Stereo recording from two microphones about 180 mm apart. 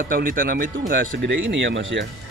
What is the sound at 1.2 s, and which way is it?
Speech, 80° right.